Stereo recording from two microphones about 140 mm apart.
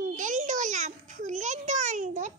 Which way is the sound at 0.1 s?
65° right (ahead or behind).